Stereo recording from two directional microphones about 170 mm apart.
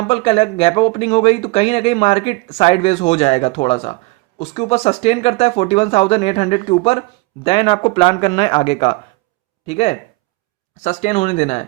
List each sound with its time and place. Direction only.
0.1 s speech: 35° left (ahead or behind)